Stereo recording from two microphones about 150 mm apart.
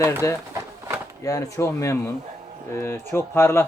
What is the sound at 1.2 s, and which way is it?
Speech, 20° left (ahead or behind).